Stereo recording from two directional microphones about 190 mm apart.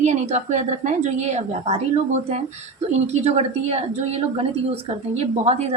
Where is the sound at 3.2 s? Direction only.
35° right (ahead or behind).